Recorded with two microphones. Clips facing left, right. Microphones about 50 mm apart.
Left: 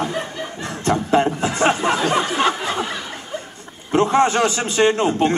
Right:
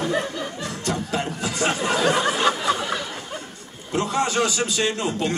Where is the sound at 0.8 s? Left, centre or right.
Left.